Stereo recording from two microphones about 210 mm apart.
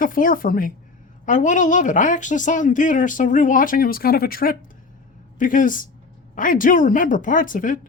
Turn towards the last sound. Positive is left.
turn(degrees=40)  # may be behind; listen again after turning